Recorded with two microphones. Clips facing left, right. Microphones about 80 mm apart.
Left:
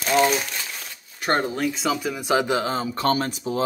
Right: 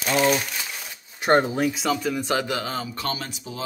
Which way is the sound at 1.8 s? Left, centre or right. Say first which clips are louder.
Even; centre.